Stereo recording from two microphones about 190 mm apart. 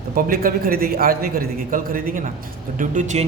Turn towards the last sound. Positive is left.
turn(degrees=-40)  # may be behind; listen again after turning